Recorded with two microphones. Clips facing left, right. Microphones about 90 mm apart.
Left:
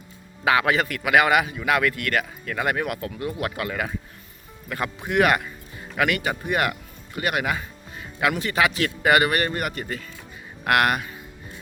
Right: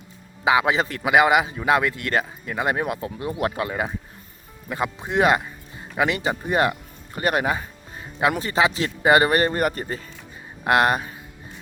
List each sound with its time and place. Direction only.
0.4 s a man's voice: 20° right (ahead or behind)